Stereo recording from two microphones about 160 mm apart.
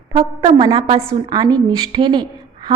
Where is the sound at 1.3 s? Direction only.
25° right (ahead or behind).